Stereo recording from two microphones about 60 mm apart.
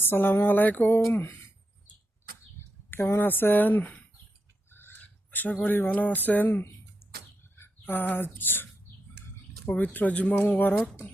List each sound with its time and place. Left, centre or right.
0.0 s speech: left
2.9 s speech: left
4.7 s a sound: left
5.6 s speech: left
7.0 s arrow: centre
7.5 s speech: left
9.6 s speech: left